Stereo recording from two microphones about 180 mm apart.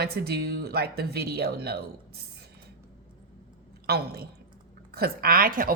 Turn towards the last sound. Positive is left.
turn(degrees=-50)  # may be behind; listen again after turning